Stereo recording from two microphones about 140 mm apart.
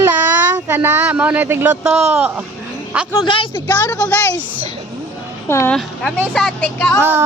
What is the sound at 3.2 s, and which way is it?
Speech, 35° left (ahead or behind).